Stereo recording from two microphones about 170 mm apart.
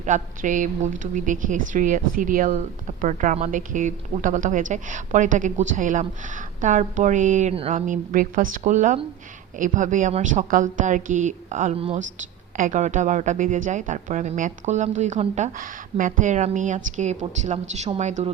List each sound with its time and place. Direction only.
0.0 s speech: 50° right (ahead or behind)
11.8 s speech: 35° right (ahead or behind)
12.5 s speech: 50° right (ahead or behind)